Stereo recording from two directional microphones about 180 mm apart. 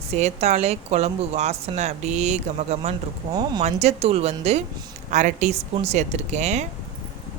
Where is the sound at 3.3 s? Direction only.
25° right (ahead or behind).